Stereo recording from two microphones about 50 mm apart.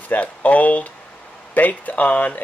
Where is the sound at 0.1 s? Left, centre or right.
Left.